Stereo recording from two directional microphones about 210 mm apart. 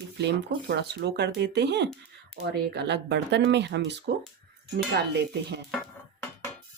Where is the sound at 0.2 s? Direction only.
55° right (ahead or behind).